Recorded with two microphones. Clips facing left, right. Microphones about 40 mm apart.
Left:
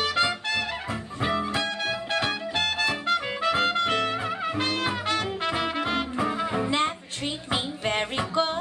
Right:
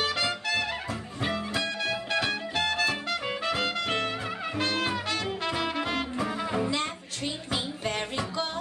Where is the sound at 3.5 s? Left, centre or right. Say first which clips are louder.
Left 5 dB; left.